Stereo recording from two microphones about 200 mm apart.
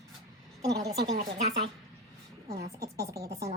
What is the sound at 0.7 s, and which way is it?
Speech, 15° right (ahead or behind).